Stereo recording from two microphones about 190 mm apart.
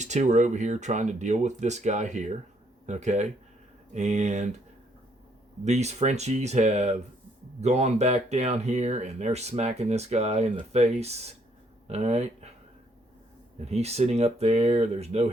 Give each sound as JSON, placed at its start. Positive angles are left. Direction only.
{"t": 0.0, "sound": "speech", "side_deg": -40}
{"t": 5.6, "sound": "speech", "side_deg": -35}
{"t": 13.6, "sound": "speech", "side_deg": -35}